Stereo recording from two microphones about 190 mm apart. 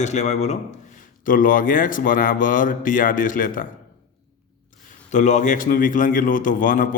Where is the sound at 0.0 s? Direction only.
40° left (ahead or behind).